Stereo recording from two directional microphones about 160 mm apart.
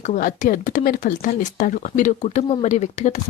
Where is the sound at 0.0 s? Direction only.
55° left (ahead or behind).